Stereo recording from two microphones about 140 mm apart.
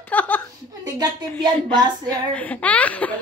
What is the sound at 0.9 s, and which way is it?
Speech, 30° right (ahead or behind).